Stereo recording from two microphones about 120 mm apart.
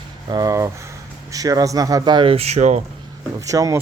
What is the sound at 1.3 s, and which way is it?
Speech, 30° right (ahead or behind).